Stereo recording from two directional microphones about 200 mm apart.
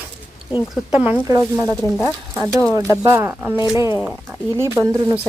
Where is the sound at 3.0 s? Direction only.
10° right (ahead or behind).